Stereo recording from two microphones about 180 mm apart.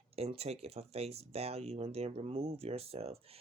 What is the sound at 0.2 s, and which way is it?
Speech, 35° right (ahead or behind).